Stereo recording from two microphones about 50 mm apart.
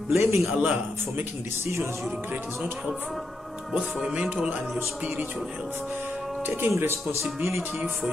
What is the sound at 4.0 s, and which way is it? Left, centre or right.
Speech, centre.